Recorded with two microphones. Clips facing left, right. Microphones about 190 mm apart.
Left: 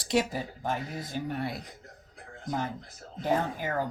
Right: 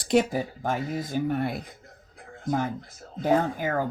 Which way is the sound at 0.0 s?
50° right (ahead or behind).